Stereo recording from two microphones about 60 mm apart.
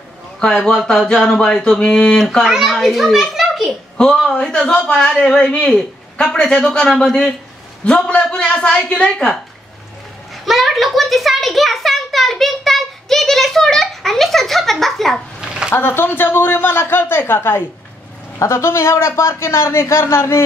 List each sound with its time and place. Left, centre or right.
0.4 s a man's voice: centre
2.4 s a child's voice: centre
4.0 s a man's voice: centre
10.4 s a sound: centre
15.4 s a sound: centre
15.7 s speech: left
18.4 s a man's voice: left